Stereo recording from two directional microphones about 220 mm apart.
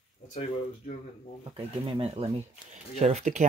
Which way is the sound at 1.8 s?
25° right (ahead or behind).